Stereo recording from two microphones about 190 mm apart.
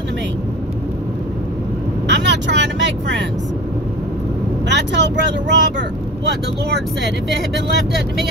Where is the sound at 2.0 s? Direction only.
65° right (ahead or behind).